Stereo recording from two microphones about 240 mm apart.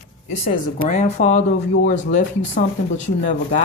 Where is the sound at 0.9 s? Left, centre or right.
Left.